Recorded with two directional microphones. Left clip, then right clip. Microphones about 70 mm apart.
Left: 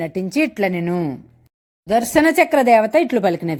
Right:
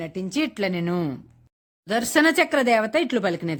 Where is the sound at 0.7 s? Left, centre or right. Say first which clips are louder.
Left 4 dB; centre.